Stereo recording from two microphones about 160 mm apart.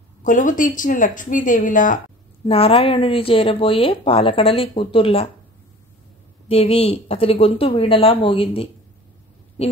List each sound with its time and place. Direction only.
0.2 s speech: 55° left (ahead or behind)
2.4 s speech: 35° left (ahead or behind)
6.5 s a woman's voice: 35° left (ahead or behind)